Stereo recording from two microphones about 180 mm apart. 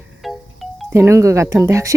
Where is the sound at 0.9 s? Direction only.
15° right (ahead or behind).